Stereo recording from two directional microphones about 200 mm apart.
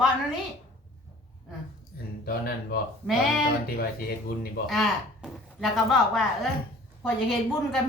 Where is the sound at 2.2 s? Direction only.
50° left (ahead or behind).